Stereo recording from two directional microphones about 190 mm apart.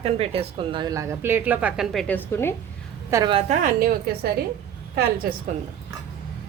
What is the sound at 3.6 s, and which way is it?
Speech, 50° right (ahead or behind).